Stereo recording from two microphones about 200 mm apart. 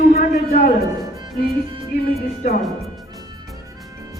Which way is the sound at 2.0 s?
45° left (ahead or behind).